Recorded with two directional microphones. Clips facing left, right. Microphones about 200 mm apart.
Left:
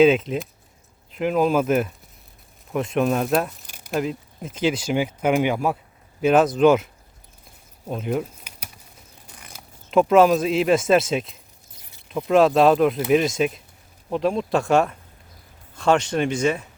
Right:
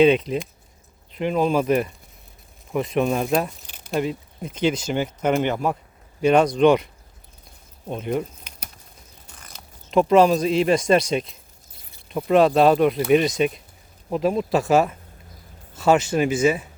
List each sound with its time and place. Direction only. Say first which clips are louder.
0.0 s speech: even; centre (ahead or behind)
7.9 s a sound: even; 5° left (ahead or behind)
9.4 s speech: left 1 dB; 5° left (ahead or behind)